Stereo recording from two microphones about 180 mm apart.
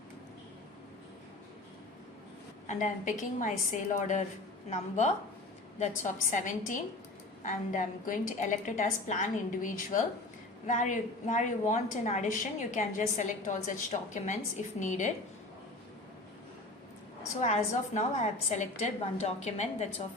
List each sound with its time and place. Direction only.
2.6 s a woman's voice: 45° left (ahead or behind)
17.4 s a woman's voice: 40° left (ahead or behind)